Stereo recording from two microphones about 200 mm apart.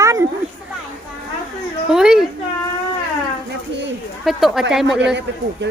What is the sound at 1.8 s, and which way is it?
Speech, 5° right (ahead or behind).